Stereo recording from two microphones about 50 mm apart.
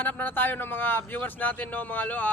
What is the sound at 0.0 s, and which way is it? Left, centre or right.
Speech, left.